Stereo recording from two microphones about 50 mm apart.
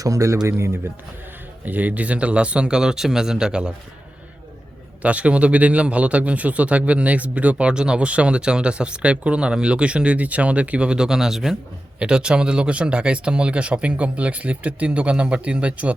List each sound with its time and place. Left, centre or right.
0.1 s speech: right
0.4 s speech: right
1.6 s speech: right; by 3.7 s centre
5.0 s speech: right; by 11.5 s centre
11.9 s speech: centre